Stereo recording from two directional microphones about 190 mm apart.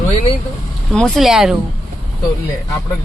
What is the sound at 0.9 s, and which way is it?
Speech, 5° left (ahead or behind).